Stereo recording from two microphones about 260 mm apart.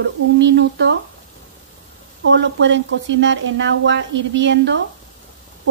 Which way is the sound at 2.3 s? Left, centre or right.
Right.